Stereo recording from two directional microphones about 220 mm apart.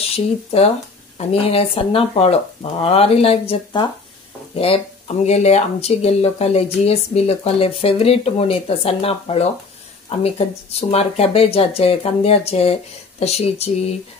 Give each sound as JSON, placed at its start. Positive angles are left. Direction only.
{"t": 0.1, "sound": "speech", "side_deg": 25}